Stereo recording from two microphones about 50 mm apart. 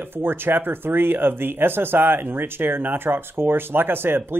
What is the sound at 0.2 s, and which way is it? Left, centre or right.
Speech, right.